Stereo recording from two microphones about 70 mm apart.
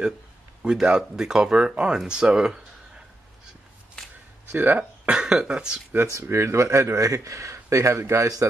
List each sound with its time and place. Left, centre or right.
0.6 s speech: centre
4.5 s speech: right
5.1 s speech: centre
6.2 s speech: right